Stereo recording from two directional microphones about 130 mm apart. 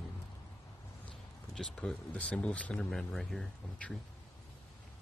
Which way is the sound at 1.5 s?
10° left (ahead or behind).